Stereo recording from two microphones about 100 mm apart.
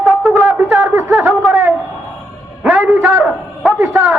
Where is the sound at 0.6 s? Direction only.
20° right (ahead or behind).